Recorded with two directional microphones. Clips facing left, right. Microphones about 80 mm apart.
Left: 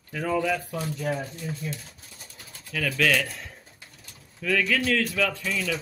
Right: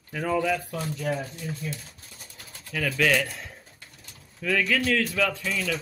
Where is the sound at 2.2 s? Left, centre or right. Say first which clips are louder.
Right 1 dB; centre.